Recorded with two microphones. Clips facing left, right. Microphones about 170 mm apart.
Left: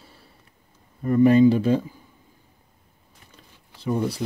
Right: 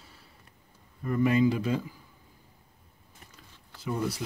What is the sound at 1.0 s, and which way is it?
Speech, 35° left (ahead or behind).